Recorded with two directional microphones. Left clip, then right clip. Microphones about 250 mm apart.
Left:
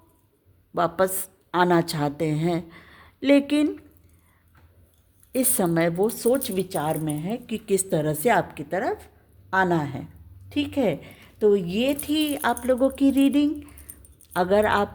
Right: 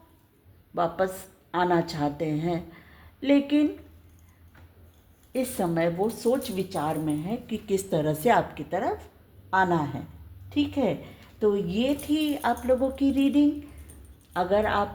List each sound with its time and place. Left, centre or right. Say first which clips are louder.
0.7 s a woman's voice: left 4 dB; left
5.3 s a woman's voice: left 4 dB; left